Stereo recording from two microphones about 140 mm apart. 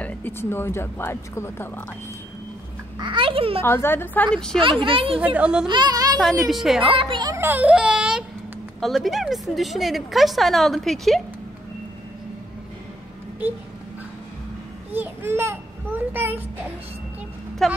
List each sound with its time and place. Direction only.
0.0 s speech: 15° left (ahead or behind)
3.0 s a child's voice: 35° right (ahead or behind)
3.6 s speech: 15° left (ahead or behind)
4.6 s a child's voice: 35° right (ahead or behind)
5.2 s speech: 10° right (ahead or behind)
5.7 s speech: 30° right (ahead or behind)
6.5 s a woman's voice: centre (ahead or behind)
6.9 s a child's voice: 35° right (ahead or behind)
7.3 s a child's voice: 15° right (ahead or behind); by 11.2 s centre (ahead or behind)
14.9 s a sound: 15° right (ahead or behind)
17.6 s a woman's voice: centre (ahead or behind)